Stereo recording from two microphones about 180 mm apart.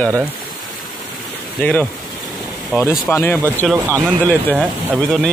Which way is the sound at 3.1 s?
10° left (ahead or behind).